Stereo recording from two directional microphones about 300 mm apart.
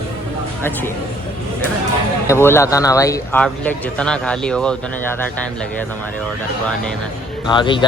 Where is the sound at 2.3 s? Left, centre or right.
Centre.